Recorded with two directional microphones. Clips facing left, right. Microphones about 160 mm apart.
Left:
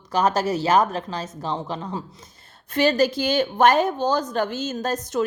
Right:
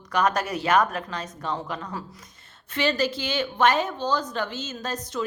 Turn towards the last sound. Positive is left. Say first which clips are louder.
# left 6 dB
turn(degrees=45)  # may be behind; listen again after turning